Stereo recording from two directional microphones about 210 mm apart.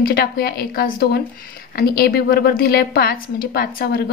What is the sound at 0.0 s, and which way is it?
A woman's voice, 50° left (ahead or behind).